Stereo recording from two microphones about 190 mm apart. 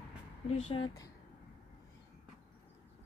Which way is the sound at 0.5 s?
30° left (ahead or behind).